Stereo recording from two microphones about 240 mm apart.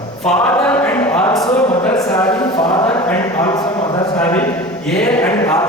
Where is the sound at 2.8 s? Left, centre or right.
Centre.